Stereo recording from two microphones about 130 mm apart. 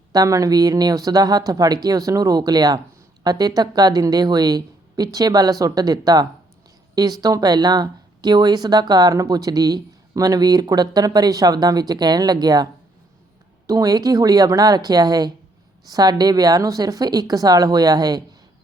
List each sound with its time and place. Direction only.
0.1 s speech: 25° right (ahead or behind)
13.7 s speech: 25° right (ahead or behind)